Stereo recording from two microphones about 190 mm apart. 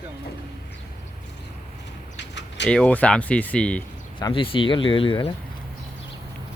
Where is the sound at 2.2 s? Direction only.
65° left (ahead or behind).